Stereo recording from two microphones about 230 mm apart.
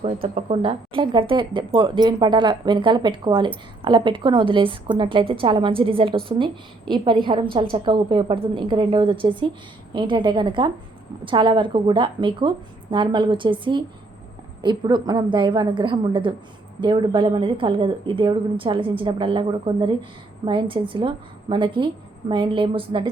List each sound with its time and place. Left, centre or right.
0.0 s a woman's voice: right